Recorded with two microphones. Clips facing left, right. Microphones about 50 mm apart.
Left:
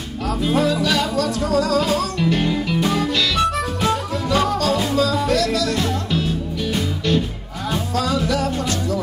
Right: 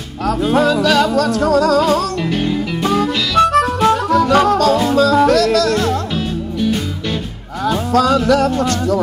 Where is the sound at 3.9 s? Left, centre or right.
Right.